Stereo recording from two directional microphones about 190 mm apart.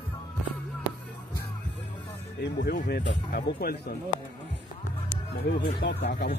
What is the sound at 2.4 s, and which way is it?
Speech, 60° left (ahead or behind).